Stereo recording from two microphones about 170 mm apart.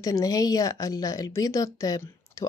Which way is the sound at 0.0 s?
20° left (ahead or behind).